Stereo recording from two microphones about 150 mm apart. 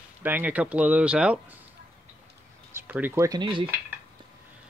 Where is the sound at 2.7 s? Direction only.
15° right (ahead or behind).